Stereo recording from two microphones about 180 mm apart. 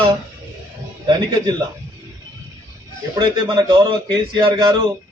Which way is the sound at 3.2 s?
25° right (ahead or behind).